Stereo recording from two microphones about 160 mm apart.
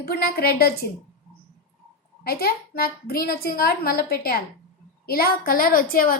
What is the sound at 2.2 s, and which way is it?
A woman's voice, 70° left (ahead or behind).